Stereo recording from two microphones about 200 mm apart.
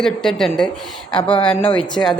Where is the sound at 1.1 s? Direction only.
25° left (ahead or behind).